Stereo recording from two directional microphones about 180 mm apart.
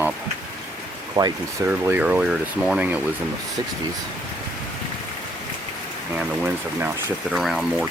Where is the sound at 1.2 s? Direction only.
25° right (ahead or behind).